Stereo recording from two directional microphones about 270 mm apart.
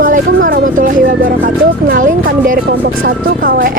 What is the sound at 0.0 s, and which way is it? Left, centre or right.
Speech, right.